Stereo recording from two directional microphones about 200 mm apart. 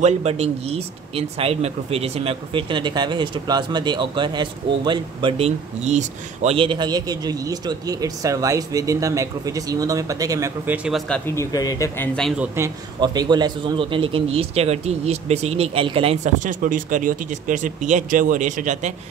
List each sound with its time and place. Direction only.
0.0 s speech: 30° right (ahead or behind); by 12.4 s centre (ahead or behind)
12.5 s speech: 20° right (ahead or behind)
16.4 s speech: 40° right (ahead or behind)